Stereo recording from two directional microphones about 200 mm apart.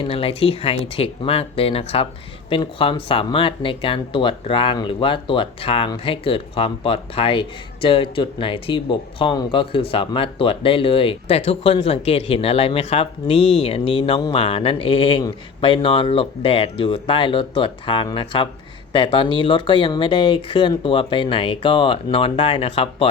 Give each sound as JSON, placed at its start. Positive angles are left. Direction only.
{"t": 0.0, "sound": "speech", "side_deg": 30}